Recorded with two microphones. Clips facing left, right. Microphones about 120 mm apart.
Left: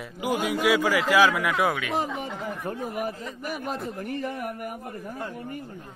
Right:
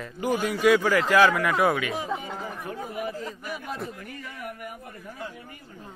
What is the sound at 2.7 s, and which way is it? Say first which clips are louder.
Speech: left 4 dB; 40° left (ahead or behind).